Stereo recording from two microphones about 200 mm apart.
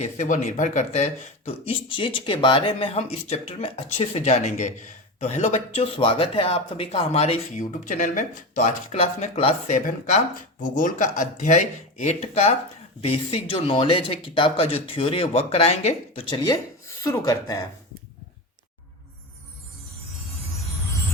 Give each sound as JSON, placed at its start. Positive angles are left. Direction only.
{"t": 0.0, "sound": "speech", "side_deg": 35}
{"t": 17.0, "sound": "speech", "side_deg": 15}